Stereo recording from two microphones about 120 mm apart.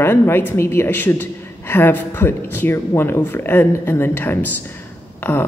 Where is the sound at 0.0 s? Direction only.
20° left (ahead or behind).